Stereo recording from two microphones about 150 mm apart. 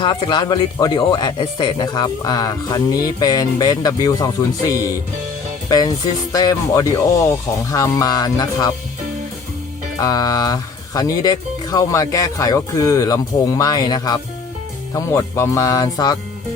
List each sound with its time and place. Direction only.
0.0 s speech: 30° left (ahead or behind)
5.6 s speech: 25° left (ahead or behind)
10.0 s speech: 25° left (ahead or behind)